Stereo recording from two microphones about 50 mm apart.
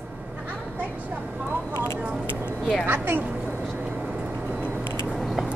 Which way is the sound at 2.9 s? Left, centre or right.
Right.